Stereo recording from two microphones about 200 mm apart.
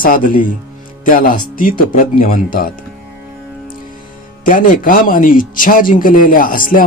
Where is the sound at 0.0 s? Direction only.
45° left (ahead or behind).